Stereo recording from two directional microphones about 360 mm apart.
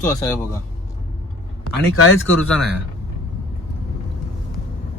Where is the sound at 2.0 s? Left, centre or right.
Left.